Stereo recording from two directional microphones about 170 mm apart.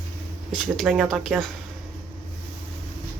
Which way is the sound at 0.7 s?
Centre (ahead or behind).